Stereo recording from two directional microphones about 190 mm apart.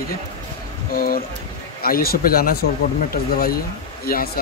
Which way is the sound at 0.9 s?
50° left (ahead or behind).